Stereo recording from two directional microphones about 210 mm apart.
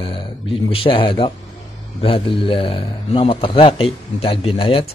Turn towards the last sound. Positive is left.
turn(degrees=25)  # may be behind; listen again after turning